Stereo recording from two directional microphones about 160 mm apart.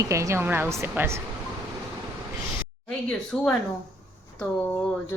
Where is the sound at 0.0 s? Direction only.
20° right (ahead or behind).